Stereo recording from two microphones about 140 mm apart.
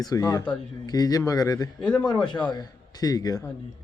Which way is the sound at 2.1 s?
5° left (ahead or behind).